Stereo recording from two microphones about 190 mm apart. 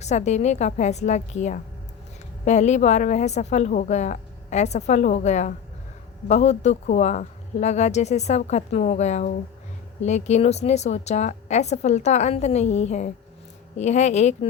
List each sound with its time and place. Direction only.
0.0 s a woman's voice: 35° left (ahead or behind)